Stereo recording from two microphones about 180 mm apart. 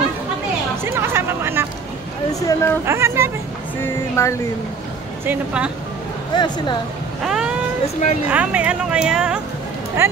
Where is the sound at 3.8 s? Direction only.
15° left (ahead or behind).